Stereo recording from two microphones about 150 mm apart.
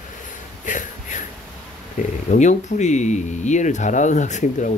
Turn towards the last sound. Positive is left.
turn(degrees=55)  # may be behind; listen again after turning